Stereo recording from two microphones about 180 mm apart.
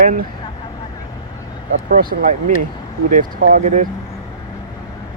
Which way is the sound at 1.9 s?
55° right (ahead or behind).